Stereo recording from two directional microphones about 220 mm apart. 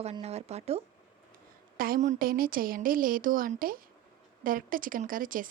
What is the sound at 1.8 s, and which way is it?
A woman's voice, 40° right (ahead or behind).